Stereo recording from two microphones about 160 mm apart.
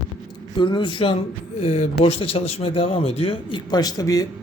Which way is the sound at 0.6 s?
30° left (ahead or behind).